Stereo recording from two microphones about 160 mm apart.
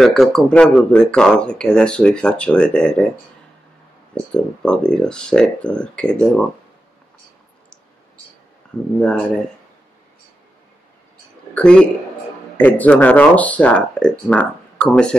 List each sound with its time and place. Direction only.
0.0 s speech: centre (ahead or behind)
4.3 s speech: 5° left (ahead or behind)
11.5 s speech: 5° left (ahead or behind)